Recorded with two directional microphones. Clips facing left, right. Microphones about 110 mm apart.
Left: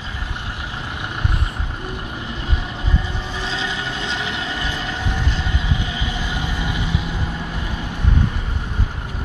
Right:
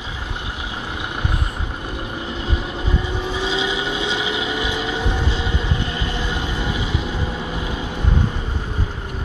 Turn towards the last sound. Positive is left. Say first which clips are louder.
# right 2 dB
turn(degrees=-10)  # may be behind; listen again after turning